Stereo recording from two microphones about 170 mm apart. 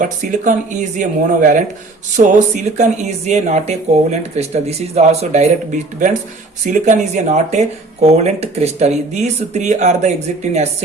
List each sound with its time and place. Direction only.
0.0 s speech: 45° right (ahead or behind)
6.7 s speech: 45° right (ahead or behind)